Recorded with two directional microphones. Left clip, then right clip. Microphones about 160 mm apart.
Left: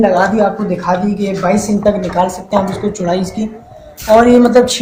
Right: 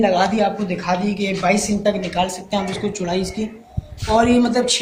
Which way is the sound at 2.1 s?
35° left (ahead or behind).